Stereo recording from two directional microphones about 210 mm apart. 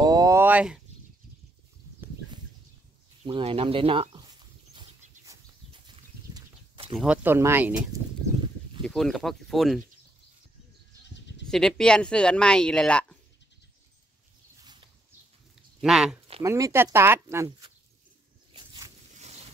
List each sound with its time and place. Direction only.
0.0 s a sound: 15° right (ahead or behind)
3.3 s speech: 25° right (ahead or behind)
5.2 s livestock: 20° right (ahead or behind)
7.0 s speech: 10° right (ahead or behind)
8.8 s speech: centre (ahead or behind)
11.4 s speech: 5° left (ahead or behind)
15.8 s speech: centre (ahead or behind)
16.4 s speech: 15° right (ahead or behind)
18.5 s a sound: 20° right (ahead or behind)
19.1 s a sound: 30° right (ahead or behind)